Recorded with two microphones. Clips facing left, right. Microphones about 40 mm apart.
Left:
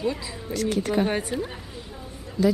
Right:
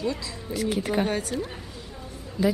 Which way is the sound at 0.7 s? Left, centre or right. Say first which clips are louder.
Left 2 dB; centre.